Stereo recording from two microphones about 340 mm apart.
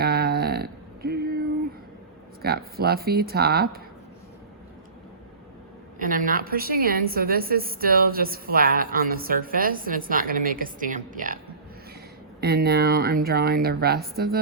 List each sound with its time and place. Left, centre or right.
0.0 s a sound: right
2.4 s a woman's voice: right
6.0 s a woman's voice: right
12.4 s a woman's voice: right